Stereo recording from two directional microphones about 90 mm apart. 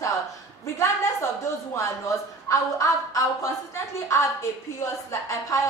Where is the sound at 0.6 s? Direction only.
30° left (ahead or behind).